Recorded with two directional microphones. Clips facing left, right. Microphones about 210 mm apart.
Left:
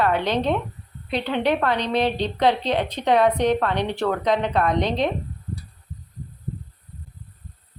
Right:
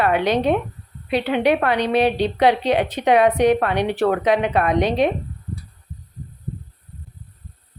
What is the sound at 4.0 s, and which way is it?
Speech, 65° right (ahead or behind).